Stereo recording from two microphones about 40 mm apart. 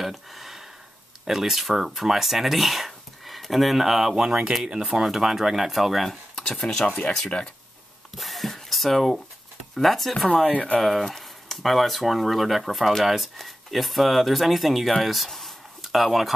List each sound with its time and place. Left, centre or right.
0.0 s a sound: centre
1.2 s speech: centre
4.1 s speech: centre
6.3 s speech: centre
8.2 s a sound: centre
9.8 s speech: centre
10.1 s speech: centre
10.4 s speech: left
10.8 s speech: centre